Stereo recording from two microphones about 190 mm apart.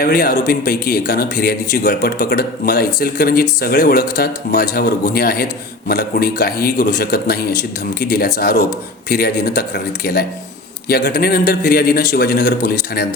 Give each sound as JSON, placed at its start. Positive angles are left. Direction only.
{"t": 0.0, "sound": "speech", "side_deg": 50}